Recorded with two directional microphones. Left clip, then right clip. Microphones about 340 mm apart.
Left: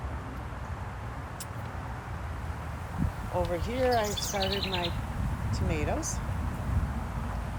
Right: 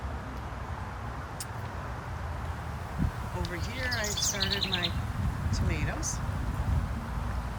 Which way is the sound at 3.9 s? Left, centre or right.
Centre.